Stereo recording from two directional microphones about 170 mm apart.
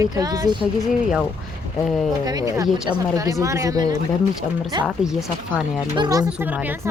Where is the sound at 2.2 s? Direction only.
20° right (ahead or behind).